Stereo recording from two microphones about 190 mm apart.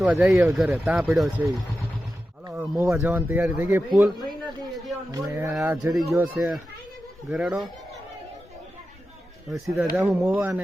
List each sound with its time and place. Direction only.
0.0 s speech: 5° right (ahead or behind)
5.1 s speech: 20° right (ahead or behind)
5.5 s speech: centre (ahead or behind)
9.5 s speech: centre (ahead or behind)